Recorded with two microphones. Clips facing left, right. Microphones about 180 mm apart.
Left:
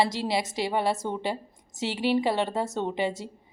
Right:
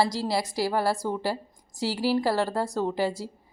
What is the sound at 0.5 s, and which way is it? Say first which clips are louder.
Speech: right 1 dB; centre (ahead or behind).